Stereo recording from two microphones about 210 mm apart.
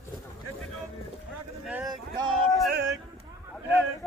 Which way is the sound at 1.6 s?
Centre (ahead or behind).